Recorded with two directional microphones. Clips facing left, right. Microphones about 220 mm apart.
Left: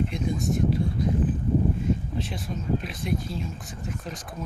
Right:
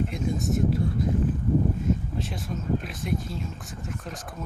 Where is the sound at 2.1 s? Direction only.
Centre (ahead or behind).